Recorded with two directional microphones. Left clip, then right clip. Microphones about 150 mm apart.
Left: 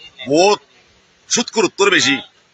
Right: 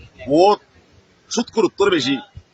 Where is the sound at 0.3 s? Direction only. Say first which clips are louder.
Left 1 dB; 25° right (ahead or behind).